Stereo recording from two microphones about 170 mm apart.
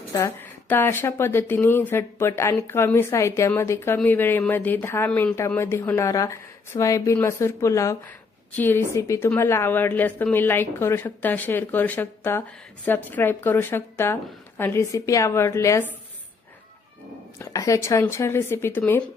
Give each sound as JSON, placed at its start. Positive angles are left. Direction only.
{"t": 0.1, "sound": "speech", "side_deg": 15}
{"t": 17.4, "sound": "speech", "side_deg": 20}